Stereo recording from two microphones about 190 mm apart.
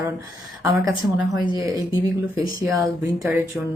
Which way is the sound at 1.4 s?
20° left (ahead or behind).